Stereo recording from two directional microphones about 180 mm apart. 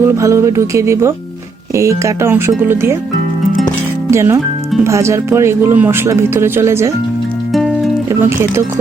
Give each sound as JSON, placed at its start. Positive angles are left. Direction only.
{"t": 0.0, "sound": "speech", "side_deg": -15}
{"t": 4.1, "sound": "speech", "side_deg": -15}
{"t": 8.2, "sound": "speech", "side_deg": -15}